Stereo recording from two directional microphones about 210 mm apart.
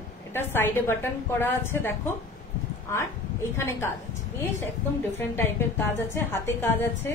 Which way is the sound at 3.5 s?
10° left (ahead or behind).